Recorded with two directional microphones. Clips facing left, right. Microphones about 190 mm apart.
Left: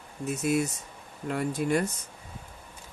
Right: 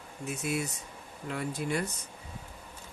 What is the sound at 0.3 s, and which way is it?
Speech, 45° left (ahead or behind).